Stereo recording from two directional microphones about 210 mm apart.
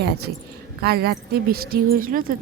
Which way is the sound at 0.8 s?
50° right (ahead or behind).